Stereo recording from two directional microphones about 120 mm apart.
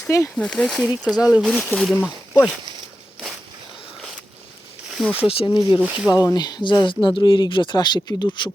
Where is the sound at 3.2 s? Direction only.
Centre (ahead or behind).